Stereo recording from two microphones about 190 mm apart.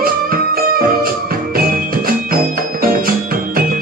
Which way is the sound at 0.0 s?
50° right (ahead or behind).